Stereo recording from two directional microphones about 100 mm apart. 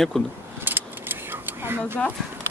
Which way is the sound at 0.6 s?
20° right (ahead or behind).